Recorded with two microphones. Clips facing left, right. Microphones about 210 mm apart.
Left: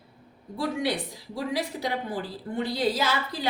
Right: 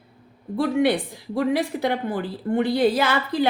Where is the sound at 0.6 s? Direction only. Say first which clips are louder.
Right 8 dB; 60° right (ahead or behind).